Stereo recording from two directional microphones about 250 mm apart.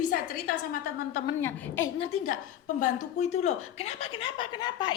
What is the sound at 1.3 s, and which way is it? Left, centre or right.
Speech, centre.